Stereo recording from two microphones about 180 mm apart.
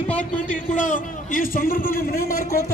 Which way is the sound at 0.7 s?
45° left (ahead or behind).